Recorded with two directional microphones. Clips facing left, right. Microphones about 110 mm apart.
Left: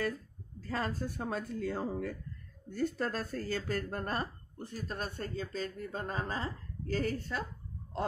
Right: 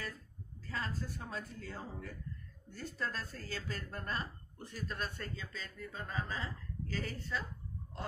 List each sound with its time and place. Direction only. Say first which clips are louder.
0.6 s speech: left 6 dB; 55° left (ahead or behind)